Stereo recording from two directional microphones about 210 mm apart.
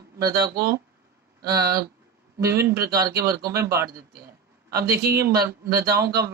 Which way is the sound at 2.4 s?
15° right (ahead or behind).